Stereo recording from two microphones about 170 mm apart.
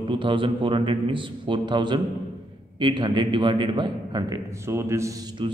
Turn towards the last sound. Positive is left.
turn(degrees=-25)  # may be behind; listen again after turning